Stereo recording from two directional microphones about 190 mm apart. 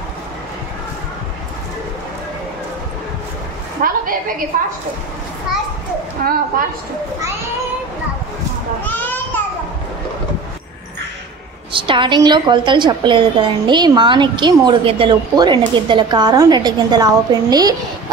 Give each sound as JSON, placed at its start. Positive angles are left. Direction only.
{"t": 3.8, "sound": "a sound", "side_deg": -45}
{"t": 4.5, "sound": "a woman's voice", "side_deg": -45}
{"t": 6.2, "sound": "a woman's voice", "side_deg": -50}
{"t": 8.8, "sound": "children playing", "side_deg": 10}
{"t": 11.7, "sound": "a woman's voice", "side_deg": -25}